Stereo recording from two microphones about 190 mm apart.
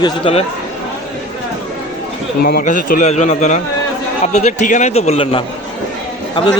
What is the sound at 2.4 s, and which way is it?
A man's voice, 45° left (ahead or behind).